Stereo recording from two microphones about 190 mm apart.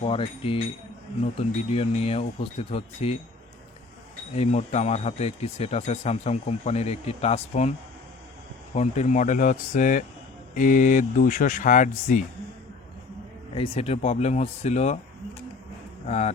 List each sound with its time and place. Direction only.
0.0 s speech: 30° left (ahead or behind)
4.4 s speech: 35° left (ahead or behind)
8.7 s speech: 35° left (ahead or behind)
13.5 s speech: 30° left (ahead or behind)
16.0 s speech: 35° left (ahead or behind)